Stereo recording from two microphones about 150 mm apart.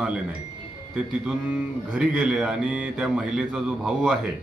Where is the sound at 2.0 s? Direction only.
5° right (ahead or behind).